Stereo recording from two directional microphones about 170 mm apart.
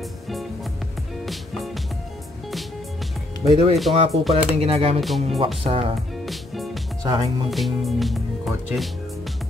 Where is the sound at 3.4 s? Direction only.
35° right (ahead or behind).